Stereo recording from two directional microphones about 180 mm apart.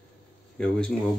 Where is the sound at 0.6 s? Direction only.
5° left (ahead or behind).